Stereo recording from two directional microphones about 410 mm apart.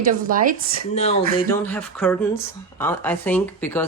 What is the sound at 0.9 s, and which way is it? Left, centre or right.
Speech, centre.